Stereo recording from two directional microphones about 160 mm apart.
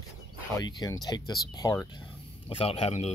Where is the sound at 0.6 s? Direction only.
25° left (ahead or behind).